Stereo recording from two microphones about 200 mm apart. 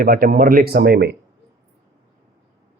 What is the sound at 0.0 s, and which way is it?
Speech, 45° right (ahead or behind).